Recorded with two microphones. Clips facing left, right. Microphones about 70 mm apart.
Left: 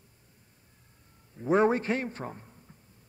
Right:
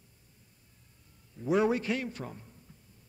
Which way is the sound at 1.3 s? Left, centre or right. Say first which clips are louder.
Left 3 dB; left.